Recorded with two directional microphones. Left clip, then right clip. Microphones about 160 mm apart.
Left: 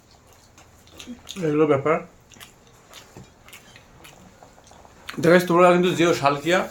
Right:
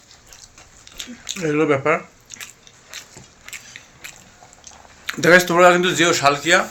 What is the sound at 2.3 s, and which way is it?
Biting, 30° left (ahead or behind).